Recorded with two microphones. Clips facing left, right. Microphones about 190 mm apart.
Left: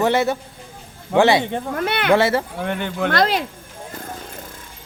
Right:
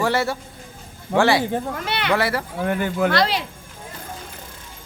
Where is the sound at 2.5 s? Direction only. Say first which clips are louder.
Right 2 dB; 5° right (ahead or behind).